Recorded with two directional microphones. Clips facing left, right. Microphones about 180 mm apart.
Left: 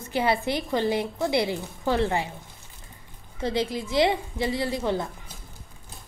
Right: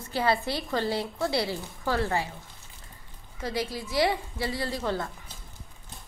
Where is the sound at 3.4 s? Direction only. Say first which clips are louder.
Left 5 dB; 25° left (ahead or behind).